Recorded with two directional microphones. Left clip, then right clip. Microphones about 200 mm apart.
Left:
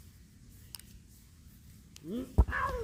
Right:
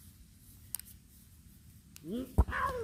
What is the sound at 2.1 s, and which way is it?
Dog, centre (ahead or behind).